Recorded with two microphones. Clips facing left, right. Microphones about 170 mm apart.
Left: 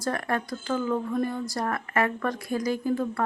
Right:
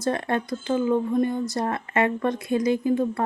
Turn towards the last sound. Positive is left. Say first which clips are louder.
# right 4 dB
turn(degrees=-20)  # may be behind; listen again after turning